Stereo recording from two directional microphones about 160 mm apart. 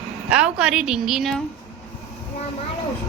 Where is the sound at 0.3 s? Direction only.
5° right (ahead or behind).